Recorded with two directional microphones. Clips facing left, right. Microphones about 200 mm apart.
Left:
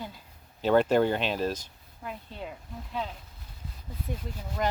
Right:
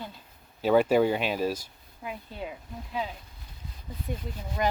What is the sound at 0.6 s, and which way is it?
Speech, 10° right (ahead or behind).